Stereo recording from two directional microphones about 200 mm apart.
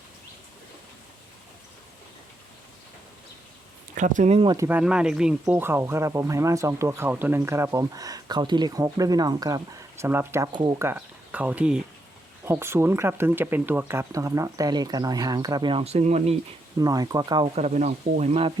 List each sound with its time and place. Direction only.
3.9 s speech: 40° right (ahead or behind)
4.5 s speech: 10° right (ahead or behind); by 16.4 s 35° right (ahead or behind)
16.8 s speech: 20° right (ahead or behind)